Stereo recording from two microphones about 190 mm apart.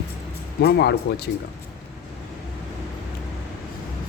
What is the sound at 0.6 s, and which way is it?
Speech, 60° left (ahead or behind).